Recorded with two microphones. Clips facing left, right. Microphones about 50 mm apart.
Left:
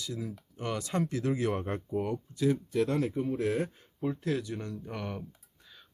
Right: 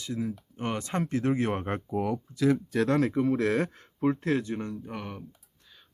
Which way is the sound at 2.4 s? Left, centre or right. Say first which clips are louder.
Right 3 dB; right.